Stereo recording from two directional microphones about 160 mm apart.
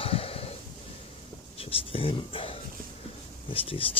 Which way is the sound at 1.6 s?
35° left (ahead or behind).